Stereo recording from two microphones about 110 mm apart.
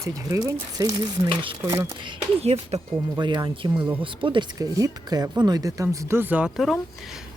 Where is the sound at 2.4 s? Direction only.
70° right (ahead or behind).